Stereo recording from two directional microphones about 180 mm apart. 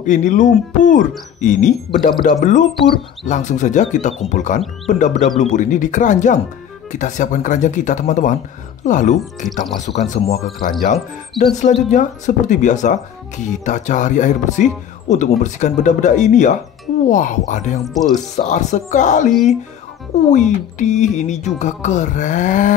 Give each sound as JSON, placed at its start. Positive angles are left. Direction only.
{"t": 0.0, "sound": "speech", "side_deg": 45}